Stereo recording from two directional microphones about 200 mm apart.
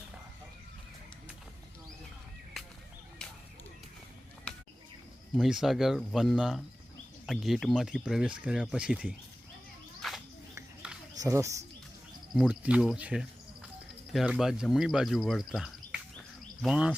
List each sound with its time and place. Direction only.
5.3 s speech: centre (ahead or behind)
10.0 s bird: centre (ahead or behind)
10.8 s a sound: 5° right (ahead or behind)
11.2 s speech: 15° right (ahead or behind)
12.3 s speech: 5° right (ahead or behind)